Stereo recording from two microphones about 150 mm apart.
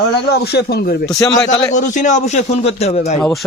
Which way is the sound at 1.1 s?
25° left (ahead or behind).